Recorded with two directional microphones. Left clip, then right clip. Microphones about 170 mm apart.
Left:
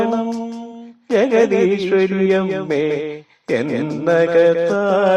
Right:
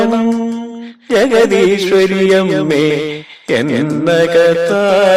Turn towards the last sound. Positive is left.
turn(degrees=-25)  # may be behind; listen again after turning